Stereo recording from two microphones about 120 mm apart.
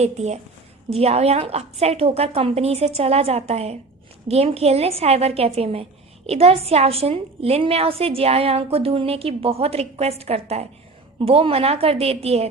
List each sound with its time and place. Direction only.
0.0 s a woman's voice: 65° right (ahead or behind)